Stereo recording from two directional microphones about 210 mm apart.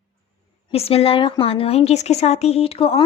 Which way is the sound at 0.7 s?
30° left (ahead or behind).